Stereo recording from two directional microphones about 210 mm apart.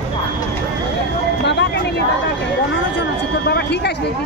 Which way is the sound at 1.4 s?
55° left (ahead or behind).